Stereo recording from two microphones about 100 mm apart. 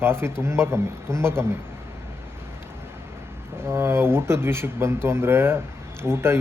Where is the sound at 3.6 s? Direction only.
25° right (ahead or behind).